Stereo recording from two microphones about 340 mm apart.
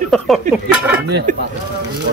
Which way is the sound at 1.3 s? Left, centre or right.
Right.